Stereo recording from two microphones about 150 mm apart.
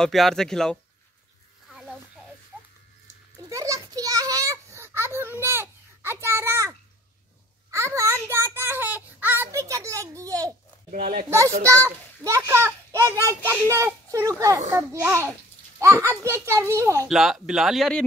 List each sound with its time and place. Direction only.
0.0 s speech: centre (ahead or behind)
1.7 s a sound: centre (ahead or behind)
2.5 s music: 5° right (ahead or behind)
3.3 s children playing: 20° right (ahead or behind)
7.7 s a sound: 20° right (ahead or behind)
10.9 s speech: 80° right
11.2 s a child's voice: 20° right (ahead or behind)
17.1 s speech: centre (ahead or behind)